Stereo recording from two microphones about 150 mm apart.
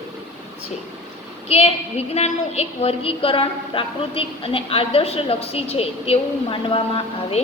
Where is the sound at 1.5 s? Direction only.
45° left (ahead or behind).